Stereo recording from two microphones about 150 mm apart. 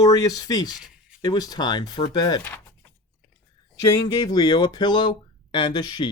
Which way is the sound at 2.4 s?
15° left (ahead or behind).